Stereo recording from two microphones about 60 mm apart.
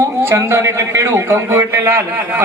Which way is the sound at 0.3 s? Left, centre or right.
Right.